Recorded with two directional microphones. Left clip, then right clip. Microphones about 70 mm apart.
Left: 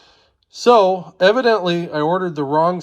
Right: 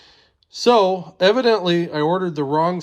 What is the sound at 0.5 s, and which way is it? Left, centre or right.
Speech, right.